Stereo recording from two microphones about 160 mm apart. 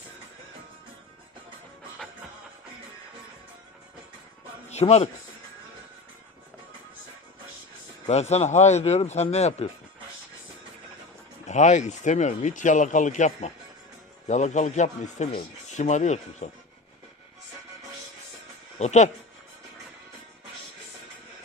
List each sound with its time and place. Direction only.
4.7 s a man's voice: 40° left (ahead or behind)
8.0 s speech: 40° left (ahead or behind)
11.4 s speech: 50° left (ahead or behind)
18.8 s speech: 45° left (ahead or behind)